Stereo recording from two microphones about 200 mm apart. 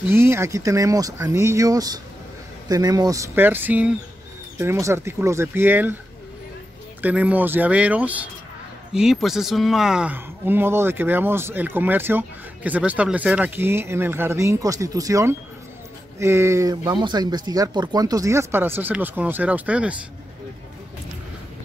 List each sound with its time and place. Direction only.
0.1 s speech: 10° right (ahead or behind)
7.0 s speech: 5° right (ahead or behind)